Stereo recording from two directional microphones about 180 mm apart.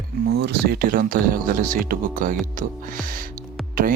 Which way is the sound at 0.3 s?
60° right (ahead or behind).